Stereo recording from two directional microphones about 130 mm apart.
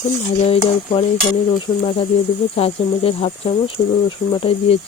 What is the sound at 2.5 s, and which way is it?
Speech, 50° left (ahead or behind).